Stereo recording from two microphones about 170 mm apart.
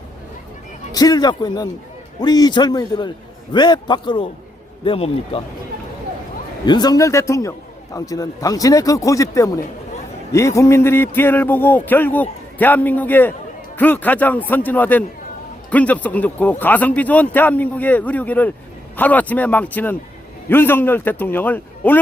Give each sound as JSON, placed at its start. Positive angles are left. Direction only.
{"t": 0.9, "sound": "a man's voice", "side_deg": 20}
{"t": 6.7, "sound": "speech", "side_deg": 25}